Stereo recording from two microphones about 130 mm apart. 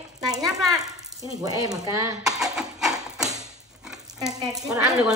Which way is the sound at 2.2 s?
5° right (ahead or behind).